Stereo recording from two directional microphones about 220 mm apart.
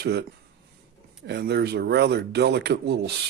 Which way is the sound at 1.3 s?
50° right (ahead or behind).